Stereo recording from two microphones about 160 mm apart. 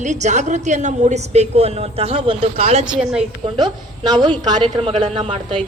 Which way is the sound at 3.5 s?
30° right (ahead or behind).